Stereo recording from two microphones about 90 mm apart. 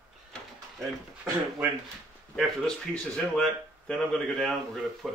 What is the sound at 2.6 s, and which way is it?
Speech, 10° left (ahead or behind).